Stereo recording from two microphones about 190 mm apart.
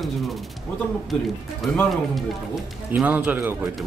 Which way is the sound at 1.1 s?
Centre (ahead or behind).